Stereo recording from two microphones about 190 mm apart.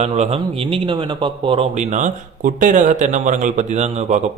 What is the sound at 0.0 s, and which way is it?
A man's voice, 35° right (ahead or behind).